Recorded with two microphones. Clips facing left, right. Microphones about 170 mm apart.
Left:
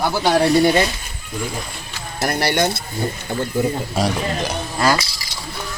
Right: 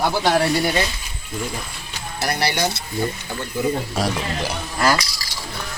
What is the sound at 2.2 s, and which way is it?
Speech, 50° left (ahead or behind).